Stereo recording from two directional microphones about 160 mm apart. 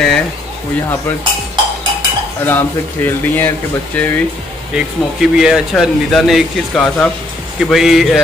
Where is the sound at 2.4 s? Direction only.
10° left (ahead or behind).